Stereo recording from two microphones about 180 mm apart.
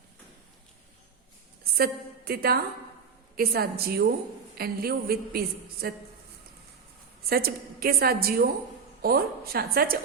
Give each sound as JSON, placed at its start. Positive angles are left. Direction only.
{"t": 1.7, "sound": "a woman's voice", "side_deg": -60}
{"t": 7.3, "sound": "a woman's voice", "side_deg": -55}